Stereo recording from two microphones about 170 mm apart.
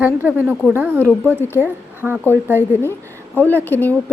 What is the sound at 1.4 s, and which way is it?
Speech, 15° left (ahead or behind).